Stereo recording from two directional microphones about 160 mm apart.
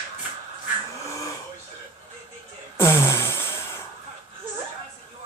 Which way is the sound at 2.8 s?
15° left (ahead or behind).